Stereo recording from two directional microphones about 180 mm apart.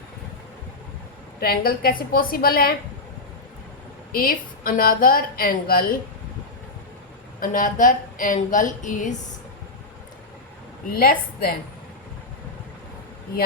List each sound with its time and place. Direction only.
1.4 s a woman's voice: 55° left (ahead or behind)
4.1 s a woman's voice: 55° left (ahead or behind)
7.3 s a woman's voice: 50° left (ahead or behind)
10.9 s a woman's voice: 55° left (ahead or behind)